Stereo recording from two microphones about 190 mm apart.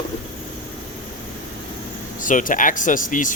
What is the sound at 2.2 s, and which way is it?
Speech, 45° left (ahead or behind).